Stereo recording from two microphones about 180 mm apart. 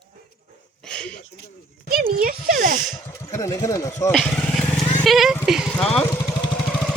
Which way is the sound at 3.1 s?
15° left (ahead or behind).